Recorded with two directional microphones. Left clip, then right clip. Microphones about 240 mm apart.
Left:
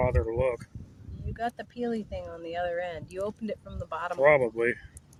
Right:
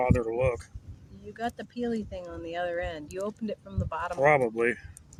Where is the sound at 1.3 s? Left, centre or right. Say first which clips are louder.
Left 1 dB; centre.